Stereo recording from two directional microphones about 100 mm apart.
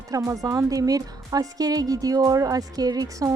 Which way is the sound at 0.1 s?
35° right (ahead or behind).